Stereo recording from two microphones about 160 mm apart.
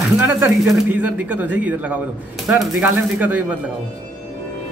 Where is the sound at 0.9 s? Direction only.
10° right (ahead or behind).